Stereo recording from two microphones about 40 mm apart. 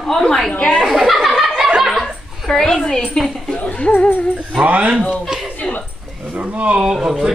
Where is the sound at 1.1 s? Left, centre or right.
Centre.